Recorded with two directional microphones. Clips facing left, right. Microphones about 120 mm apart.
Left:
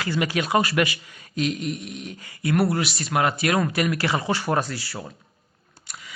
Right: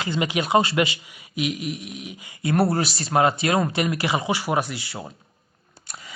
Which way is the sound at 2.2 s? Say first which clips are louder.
Right 1 dB; 25° right (ahead or behind).